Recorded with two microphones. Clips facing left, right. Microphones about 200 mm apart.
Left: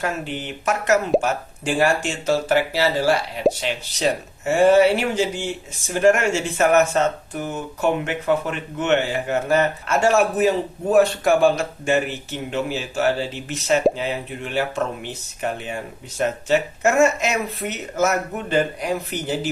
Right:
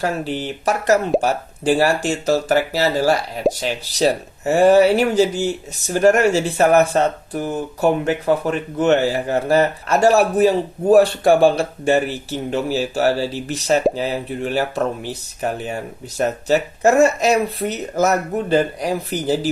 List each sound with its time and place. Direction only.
0.0 s speech: 35° right (ahead or behind)